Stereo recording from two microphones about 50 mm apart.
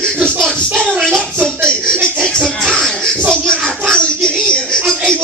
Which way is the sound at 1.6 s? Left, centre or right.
Centre.